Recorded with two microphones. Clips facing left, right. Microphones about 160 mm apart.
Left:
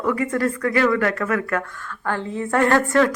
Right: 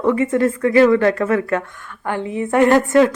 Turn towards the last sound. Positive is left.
turn(degrees=-20)  # may be behind; listen again after turning